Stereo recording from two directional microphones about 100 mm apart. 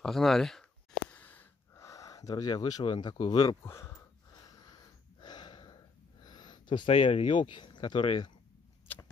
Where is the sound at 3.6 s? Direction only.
25° left (ahead or behind).